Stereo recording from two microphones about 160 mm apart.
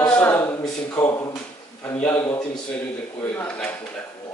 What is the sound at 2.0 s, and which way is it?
Speech, 15° left (ahead or behind).